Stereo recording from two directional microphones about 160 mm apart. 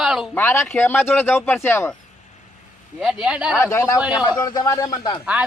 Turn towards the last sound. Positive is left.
turn(degrees=25)  # may be behind; listen again after turning